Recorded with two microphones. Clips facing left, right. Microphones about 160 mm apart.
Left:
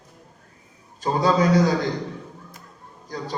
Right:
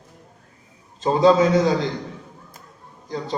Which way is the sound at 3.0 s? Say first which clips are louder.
Right 3 dB; 20° right (ahead or behind).